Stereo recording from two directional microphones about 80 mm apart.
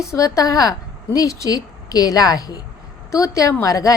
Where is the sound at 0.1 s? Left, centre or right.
Left.